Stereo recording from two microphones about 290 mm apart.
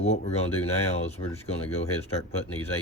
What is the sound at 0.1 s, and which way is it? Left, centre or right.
Speech, left.